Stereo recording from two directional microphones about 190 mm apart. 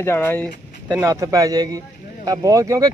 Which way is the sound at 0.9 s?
15° right (ahead or behind).